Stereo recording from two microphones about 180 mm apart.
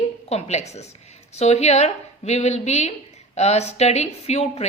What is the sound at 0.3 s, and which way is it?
A woman's voice, 35° left (ahead or behind).